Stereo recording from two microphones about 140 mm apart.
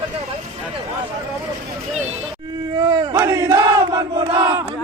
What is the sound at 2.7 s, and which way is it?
Crowd, 30° right (ahead or behind).